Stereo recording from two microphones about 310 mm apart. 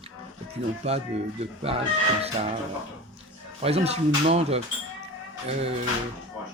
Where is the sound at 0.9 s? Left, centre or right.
Centre.